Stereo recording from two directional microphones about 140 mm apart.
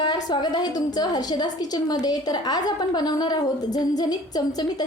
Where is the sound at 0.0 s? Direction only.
30° left (ahead or behind).